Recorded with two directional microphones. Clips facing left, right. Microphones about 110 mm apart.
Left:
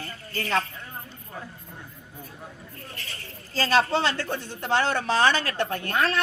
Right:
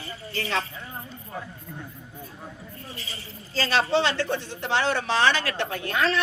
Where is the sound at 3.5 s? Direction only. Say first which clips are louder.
Left 1 dB; 45° left (ahead or behind).